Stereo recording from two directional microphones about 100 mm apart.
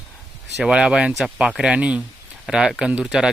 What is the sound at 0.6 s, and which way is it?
Speech, 10° right (ahead or behind).